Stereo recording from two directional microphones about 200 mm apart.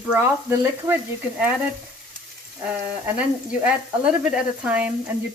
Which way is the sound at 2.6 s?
5° right (ahead or behind).